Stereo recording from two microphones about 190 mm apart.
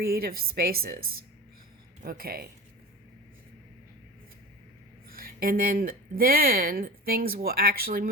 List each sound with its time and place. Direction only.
0.0 s speech: 50° right (ahead or behind)
5.0 s speech: 50° right (ahead or behind)